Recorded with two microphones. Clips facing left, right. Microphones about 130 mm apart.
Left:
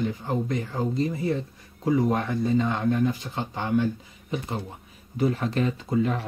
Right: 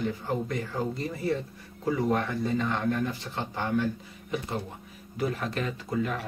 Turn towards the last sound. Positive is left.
turn(degrees=25)  # may be behind; listen again after turning